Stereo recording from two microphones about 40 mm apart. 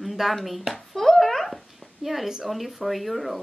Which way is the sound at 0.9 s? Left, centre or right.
Centre.